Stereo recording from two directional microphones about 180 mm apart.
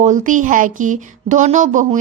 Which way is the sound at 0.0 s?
45° right (ahead or behind).